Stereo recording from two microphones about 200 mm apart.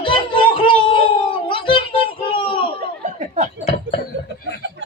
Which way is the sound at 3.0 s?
35° right (ahead or behind).